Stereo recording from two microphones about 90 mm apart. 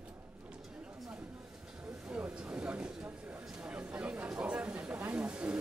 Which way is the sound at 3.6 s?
10° right (ahead or behind).